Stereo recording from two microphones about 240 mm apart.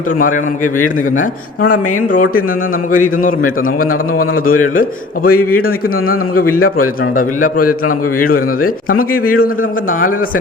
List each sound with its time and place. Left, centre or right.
0.2 s a man's voice: left
4.6 s a man's voice: left
7.6 s a man's voice: left
8.6 s a man's voice: left